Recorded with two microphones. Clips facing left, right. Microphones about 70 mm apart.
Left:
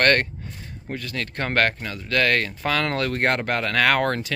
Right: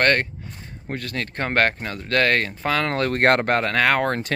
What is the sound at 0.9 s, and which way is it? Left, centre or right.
Speech, right.